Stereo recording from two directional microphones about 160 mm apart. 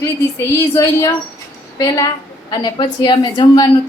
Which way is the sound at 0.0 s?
15° left (ahead or behind).